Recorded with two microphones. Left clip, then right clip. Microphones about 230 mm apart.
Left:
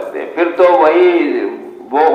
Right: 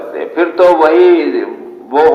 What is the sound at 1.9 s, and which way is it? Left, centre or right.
Speech, right.